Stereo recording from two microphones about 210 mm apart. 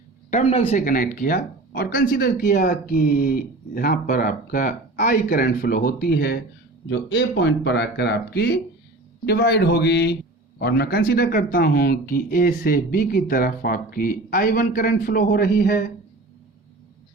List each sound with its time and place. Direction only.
0.3 s speech: 30° left (ahead or behind); by 15.7 s 50° left (ahead or behind)